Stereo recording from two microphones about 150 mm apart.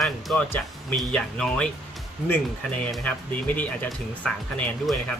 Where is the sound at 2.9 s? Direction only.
Centre (ahead or behind).